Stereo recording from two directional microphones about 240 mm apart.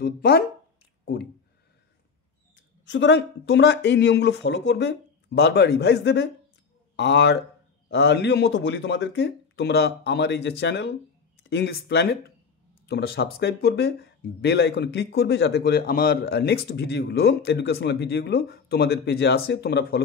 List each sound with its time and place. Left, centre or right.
0.0 s speech: left
2.8 s speech: left